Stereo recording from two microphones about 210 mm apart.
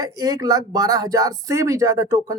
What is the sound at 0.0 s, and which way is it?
Speech, 15° right (ahead or behind).